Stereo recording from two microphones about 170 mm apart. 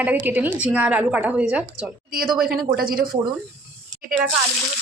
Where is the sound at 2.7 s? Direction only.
60° right (ahead or behind).